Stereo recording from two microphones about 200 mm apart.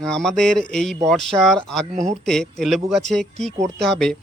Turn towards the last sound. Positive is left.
turn(degrees=0)  # may be behind; listen again after turning